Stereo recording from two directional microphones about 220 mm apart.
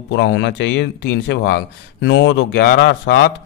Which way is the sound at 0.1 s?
50° left (ahead or behind).